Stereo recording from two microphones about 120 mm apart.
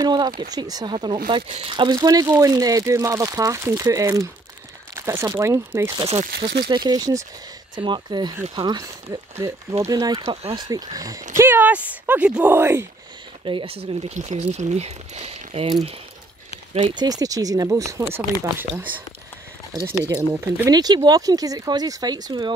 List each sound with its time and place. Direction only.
0.0 s speech: 35° right (ahead or behind)
2.0 s speech: 30° right (ahead or behind)
6.7 s speech: 40° right (ahead or behind)
10.2 s speech: 55° right (ahead or behind)
10.5 s speech: 35° right (ahead or behind)
11.3 s speech: 20° right (ahead or behind)
13.5 s speech: 50° right (ahead or behind)
14.1 s speech: 80° right; by 15.7 s 60° right (ahead or behind)
16.9 s speech: 35° right (ahead or behind); by 18.9 s 15° right (ahead or behind)
19.9 s speech: 25° right (ahead or behind)
20.7 s speech: 35° right (ahead or behind)